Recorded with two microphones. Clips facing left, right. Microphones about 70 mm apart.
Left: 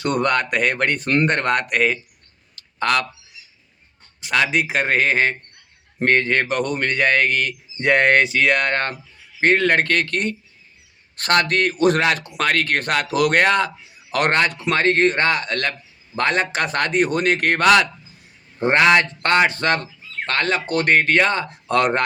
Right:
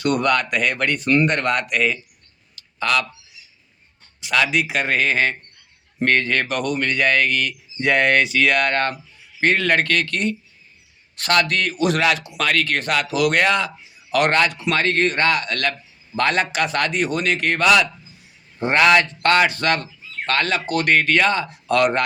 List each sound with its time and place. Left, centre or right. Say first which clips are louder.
0.0 s speech: even; left
2.6 s a sound: left 1 dB; left
4.2 s speech: even; left
18.6 s speech: even; left